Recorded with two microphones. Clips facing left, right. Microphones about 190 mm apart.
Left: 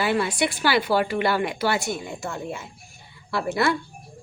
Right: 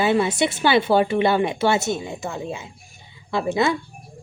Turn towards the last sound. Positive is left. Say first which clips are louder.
# right 2 dB
turn(degrees=-20)  # may be behind; listen again after turning